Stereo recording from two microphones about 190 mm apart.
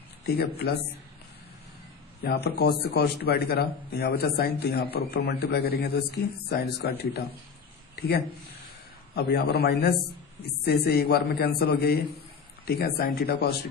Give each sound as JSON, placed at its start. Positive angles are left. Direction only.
{"t": 0.3, "sound": "speech", "side_deg": 60}
{"t": 2.2, "sound": "speech", "side_deg": 60}
{"t": 9.1, "sound": "speech", "side_deg": 60}